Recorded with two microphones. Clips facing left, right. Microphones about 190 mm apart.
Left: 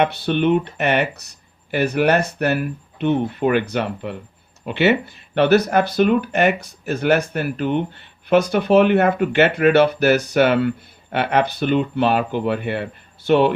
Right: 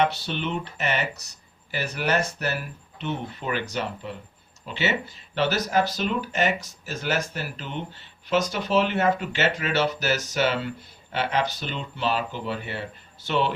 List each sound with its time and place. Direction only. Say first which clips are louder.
0.0 s speech: left 7 dB; 60° left (ahead or behind)